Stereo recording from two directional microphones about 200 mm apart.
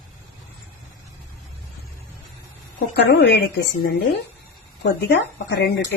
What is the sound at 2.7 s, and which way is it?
A woman's voice, 50° left (ahead or behind).